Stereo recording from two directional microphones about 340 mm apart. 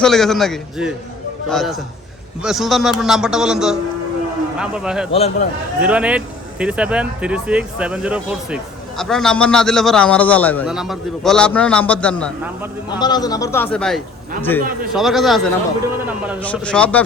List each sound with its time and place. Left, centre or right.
0.0 s speech: centre
5.1 s speech: centre
5.8 s speech: centre